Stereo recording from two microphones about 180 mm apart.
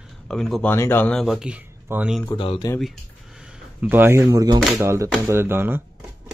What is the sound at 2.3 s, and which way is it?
Speech, 30° left (ahead or behind).